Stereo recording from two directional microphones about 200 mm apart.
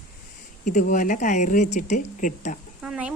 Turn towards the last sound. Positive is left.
turn(degrees=-5)  # may be behind; listen again after turning